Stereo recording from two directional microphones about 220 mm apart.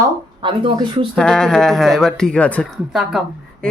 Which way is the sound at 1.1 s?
5° left (ahead or behind).